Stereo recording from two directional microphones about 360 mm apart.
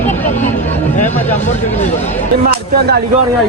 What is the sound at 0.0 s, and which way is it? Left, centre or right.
Vehicle, centre.